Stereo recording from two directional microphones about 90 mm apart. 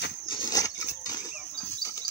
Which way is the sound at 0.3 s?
45° left (ahead or behind).